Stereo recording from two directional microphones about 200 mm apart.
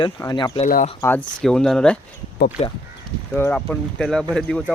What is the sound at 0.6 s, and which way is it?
Speech, 40° left (ahead or behind).